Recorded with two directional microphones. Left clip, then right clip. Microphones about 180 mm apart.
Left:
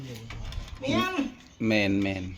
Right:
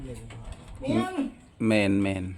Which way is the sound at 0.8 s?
15° right (ahead or behind).